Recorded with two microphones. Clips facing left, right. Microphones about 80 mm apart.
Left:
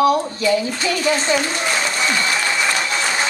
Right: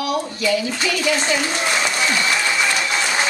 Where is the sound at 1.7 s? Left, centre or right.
Left.